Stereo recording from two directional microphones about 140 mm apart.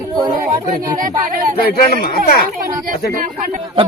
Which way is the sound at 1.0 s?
75° right (ahead or behind).